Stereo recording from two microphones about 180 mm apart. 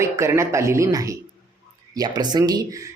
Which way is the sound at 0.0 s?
15° right (ahead or behind).